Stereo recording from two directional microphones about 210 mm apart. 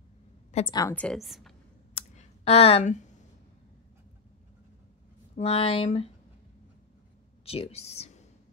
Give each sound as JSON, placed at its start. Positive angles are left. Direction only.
{"t": 0.7, "sound": "a woman's voice", "side_deg": 15}
{"t": 0.9, "sound": "a woman's voice", "side_deg": 0}
{"t": 2.0, "sound": "clicking", "side_deg": 30}
{"t": 5.3, "sound": "speech", "side_deg": 25}
{"t": 7.4, "sound": "speech", "side_deg": 25}